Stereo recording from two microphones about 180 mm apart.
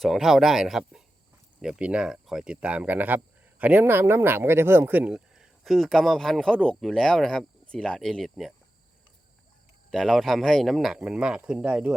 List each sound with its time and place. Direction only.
0.0 s speech: centre (ahead or behind)
9.9 s speech: centre (ahead or behind)